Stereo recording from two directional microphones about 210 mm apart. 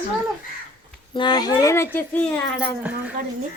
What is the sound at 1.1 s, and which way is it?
Speech, 20° left (ahead or behind).